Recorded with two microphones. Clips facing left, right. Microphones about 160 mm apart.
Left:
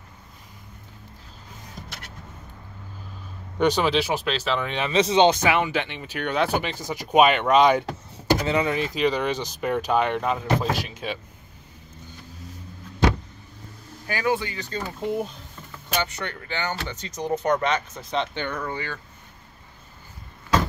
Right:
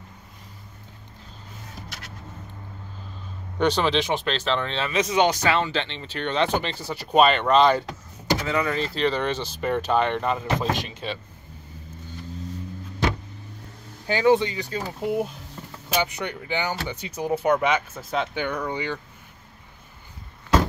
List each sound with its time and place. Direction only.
3.5 s speech: 10° left (ahead or behind)
4.9 s speech: 30° left (ahead or behind); by 11.1 s 10° left (ahead or behind)
14.0 s speech: 20° right (ahead or behind)
14.7 s speech: 10° right (ahead or behind)